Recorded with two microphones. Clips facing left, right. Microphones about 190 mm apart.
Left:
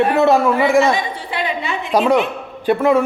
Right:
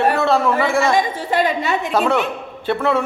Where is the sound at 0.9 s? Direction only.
45° right (ahead or behind).